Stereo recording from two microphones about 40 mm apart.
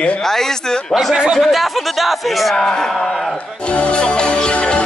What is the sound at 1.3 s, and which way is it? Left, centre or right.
Speech, centre.